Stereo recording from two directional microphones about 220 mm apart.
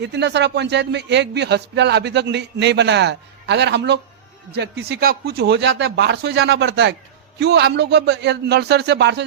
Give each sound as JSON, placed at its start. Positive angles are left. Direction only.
{"t": 0.0, "sound": "a man's voice", "side_deg": -50}